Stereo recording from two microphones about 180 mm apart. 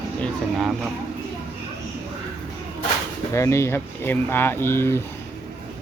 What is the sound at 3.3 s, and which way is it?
Speech, 15° left (ahead or behind).